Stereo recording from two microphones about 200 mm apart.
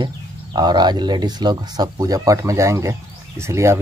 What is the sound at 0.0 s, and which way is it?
Speech, 20° right (ahead or behind).